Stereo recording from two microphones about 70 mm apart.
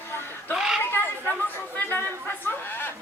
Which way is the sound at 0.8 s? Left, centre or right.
Left.